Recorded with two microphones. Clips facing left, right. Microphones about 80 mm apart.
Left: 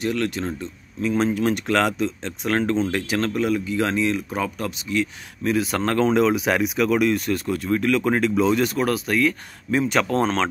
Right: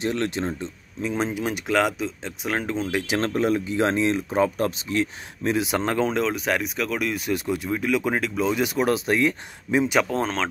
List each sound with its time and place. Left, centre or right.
0.0 s speech: right
0.6 s speech: centre
3.2 s speech: right
6.0 s speech: centre